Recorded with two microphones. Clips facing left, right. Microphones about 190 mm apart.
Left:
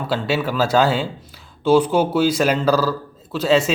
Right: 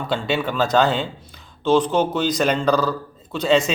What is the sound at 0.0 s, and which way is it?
A man's voice, 5° left (ahead or behind).